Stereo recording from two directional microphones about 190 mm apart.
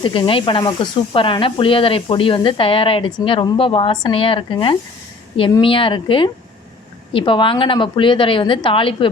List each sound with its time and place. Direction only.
0.0 s speech: 25° left (ahead or behind)